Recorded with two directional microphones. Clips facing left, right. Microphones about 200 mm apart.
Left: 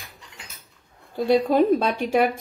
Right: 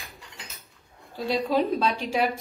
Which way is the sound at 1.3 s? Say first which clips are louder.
Left 6 dB; 50° left (ahead or behind).